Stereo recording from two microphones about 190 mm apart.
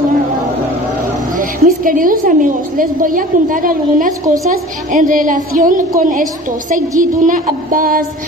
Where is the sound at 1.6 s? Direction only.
45° right (ahead or behind).